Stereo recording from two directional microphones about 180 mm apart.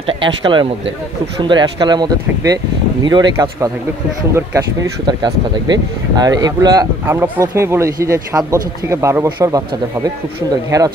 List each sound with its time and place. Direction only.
0.0 s speech: 30° right (ahead or behind)
10.7 s speech: 20° right (ahead or behind)